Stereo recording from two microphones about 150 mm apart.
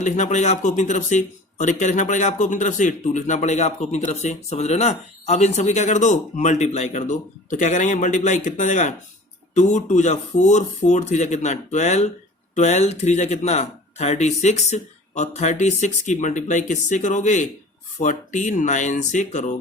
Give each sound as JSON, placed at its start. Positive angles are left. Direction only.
{"t": 0.0, "sound": "speech", "side_deg": 50}